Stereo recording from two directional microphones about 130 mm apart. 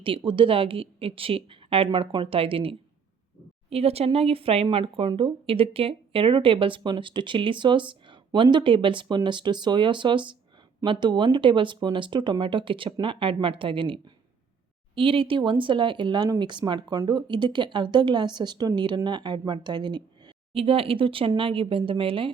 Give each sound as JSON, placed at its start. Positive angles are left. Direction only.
{"t": 0.0, "sound": "speech", "side_deg": -40}